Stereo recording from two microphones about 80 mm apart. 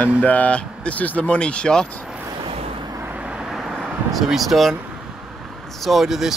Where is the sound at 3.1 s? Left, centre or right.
Centre.